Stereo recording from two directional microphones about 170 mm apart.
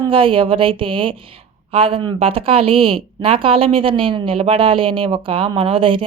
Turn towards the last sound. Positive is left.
turn(degrees=-30)  # may be behind; listen again after turning